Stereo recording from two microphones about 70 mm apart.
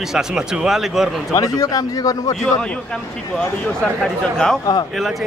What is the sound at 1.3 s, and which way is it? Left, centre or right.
A man's voice, left.